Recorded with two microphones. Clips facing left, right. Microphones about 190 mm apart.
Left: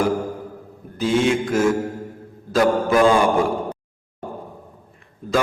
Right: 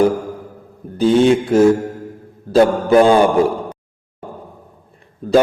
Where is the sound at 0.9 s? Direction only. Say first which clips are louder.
Right 7 dB; 35° right (ahead or behind).